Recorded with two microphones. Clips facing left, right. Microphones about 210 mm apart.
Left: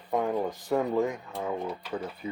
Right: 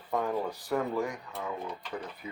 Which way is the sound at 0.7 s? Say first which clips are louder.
Left 4 dB; 20° left (ahead or behind).